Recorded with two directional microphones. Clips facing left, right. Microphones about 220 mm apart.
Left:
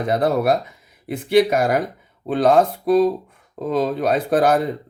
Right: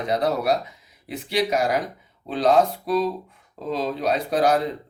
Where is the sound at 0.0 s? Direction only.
50° left (ahead or behind).